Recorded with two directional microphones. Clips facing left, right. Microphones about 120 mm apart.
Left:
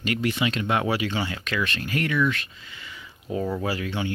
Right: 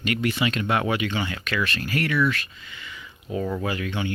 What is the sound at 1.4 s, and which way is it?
Speech, 20° left (ahead or behind).